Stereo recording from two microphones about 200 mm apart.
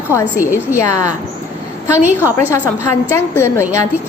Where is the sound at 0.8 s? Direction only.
15° left (ahead or behind).